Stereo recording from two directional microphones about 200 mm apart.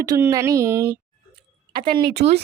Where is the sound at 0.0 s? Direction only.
15° right (ahead or behind).